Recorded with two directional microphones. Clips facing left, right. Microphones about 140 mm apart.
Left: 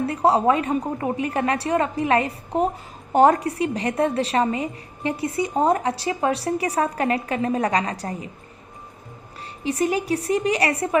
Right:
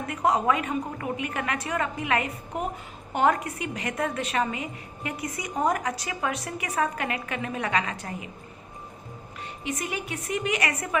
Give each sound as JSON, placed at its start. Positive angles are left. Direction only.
{"t": 0.0, "sound": "a woman's voice", "side_deg": 30}
{"t": 9.6, "sound": "a woman's voice", "side_deg": 35}